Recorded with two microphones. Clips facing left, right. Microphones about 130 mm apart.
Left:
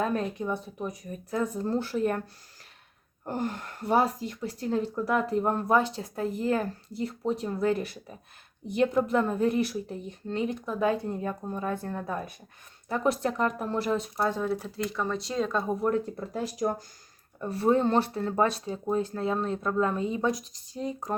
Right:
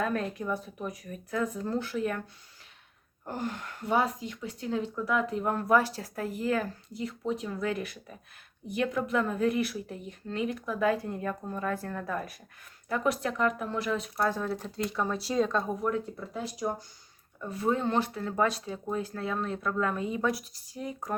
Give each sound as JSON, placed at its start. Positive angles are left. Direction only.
{"t": 0.0, "sound": "speech", "side_deg": 25}
{"t": 3.2, "sound": "a woman's voice", "side_deg": 45}
{"t": 14.2, "sound": "speech", "side_deg": 15}
{"t": 14.8, "sound": "speech", "side_deg": -5}
{"t": 15.9, "sound": "speech", "side_deg": 50}
{"t": 17.4, "sound": "a woman's voice", "side_deg": 35}